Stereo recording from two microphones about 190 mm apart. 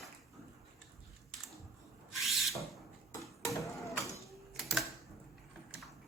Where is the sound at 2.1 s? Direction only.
Centre (ahead or behind).